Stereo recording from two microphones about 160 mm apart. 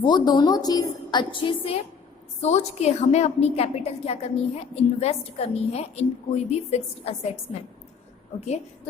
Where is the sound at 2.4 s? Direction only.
45° left (ahead or behind).